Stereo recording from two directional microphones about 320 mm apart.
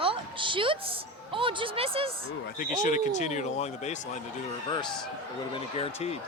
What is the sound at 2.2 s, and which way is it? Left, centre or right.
Speech, left.